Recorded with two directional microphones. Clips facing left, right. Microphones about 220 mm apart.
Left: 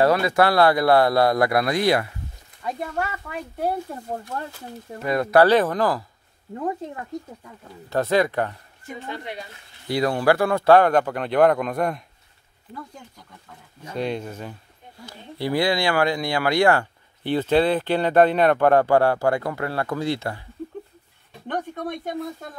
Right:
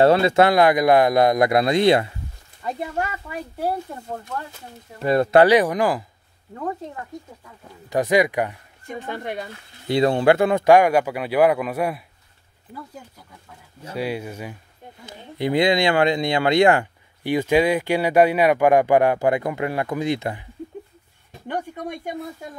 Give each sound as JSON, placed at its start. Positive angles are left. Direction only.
{"t": 0.0, "sound": "speech", "side_deg": -25}
{"t": 5.0, "sound": "speech", "side_deg": -30}
{"t": 5.5, "sound": "speech", "side_deg": -15}
{"t": 7.9, "sound": "speech", "side_deg": -15}
{"t": 9.1, "sound": "speech", "side_deg": -50}
{"t": 9.8, "sound": "speech", "side_deg": -25}
{"t": 13.5, "sound": "speech", "side_deg": -5}
{"t": 21.5, "sound": "speech", "side_deg": -10}